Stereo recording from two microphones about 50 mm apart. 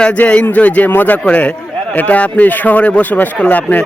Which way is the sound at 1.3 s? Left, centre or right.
Left.